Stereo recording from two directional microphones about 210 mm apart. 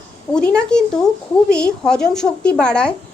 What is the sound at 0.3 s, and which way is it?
A woman's voice, 5° left (ahead or behind).